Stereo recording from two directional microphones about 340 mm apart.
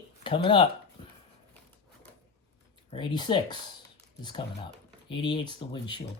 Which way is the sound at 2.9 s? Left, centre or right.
Centre.